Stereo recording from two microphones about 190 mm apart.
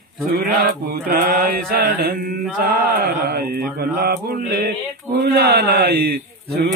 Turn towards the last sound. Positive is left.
turn(degrees=-55)  # may be behind; listen again after turning